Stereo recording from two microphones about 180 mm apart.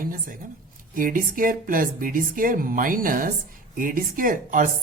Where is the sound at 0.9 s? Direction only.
50° right (ahead or behind).